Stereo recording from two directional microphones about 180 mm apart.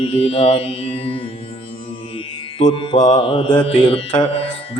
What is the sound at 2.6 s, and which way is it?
Mantra, 35° left (ahead or behind).